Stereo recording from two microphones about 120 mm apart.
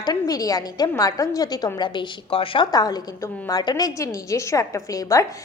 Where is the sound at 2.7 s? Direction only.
30° left (ahead or behind).